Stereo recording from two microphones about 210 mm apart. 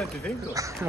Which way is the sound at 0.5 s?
15° right (ahead or behind).